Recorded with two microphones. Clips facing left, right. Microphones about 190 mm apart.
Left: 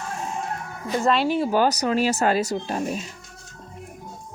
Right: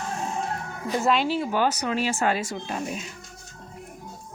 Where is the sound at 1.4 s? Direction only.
40° left (ahead or behind).